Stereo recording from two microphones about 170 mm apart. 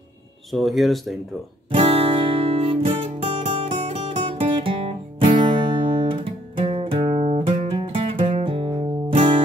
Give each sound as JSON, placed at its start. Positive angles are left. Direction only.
{"t": 0.5, "sound": "speech", "side_deg": 0}
{"t": 1.7, "sound": "music", "side_deg": -35}